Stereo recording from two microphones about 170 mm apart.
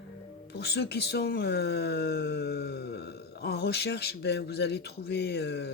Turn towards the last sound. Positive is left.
turn(degrees=75)  # may be behind; listen again after turning